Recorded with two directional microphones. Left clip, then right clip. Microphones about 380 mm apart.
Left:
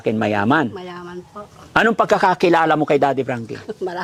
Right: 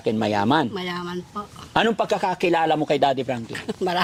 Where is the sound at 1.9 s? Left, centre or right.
Left.